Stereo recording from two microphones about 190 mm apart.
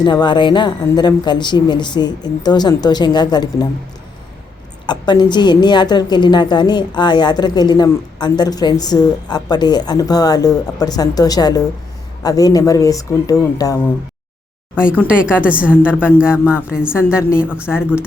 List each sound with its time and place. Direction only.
0.0 s a woman's voice: 25° left (ahead or behind)
4.9 s a woman's voice: 25° left (ahead or behind)
15.0 s a woman's voice: 5° right (ahead or behind)